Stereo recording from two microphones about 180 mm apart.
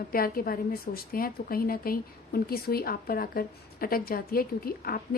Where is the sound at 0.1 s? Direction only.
55° left (ahead or behind).